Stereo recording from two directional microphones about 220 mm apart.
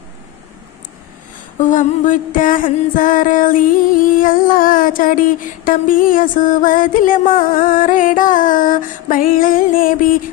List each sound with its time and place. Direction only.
1.5 s music: 35° left (ahead or behind)